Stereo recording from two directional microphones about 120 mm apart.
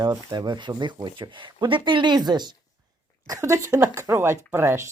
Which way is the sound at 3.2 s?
25° right (ahead or behind).